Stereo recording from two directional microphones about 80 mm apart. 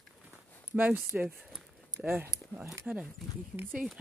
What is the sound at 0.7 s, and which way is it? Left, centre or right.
Speech, centre.